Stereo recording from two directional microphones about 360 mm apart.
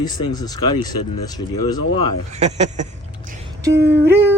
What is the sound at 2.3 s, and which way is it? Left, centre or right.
Speech, centre.